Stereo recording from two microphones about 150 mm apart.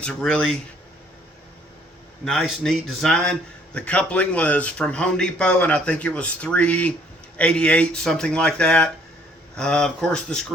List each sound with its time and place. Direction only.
0.0 s speech: 5° left (ahead or behind)
2.2 s a man's voice: centre (ahead or behind)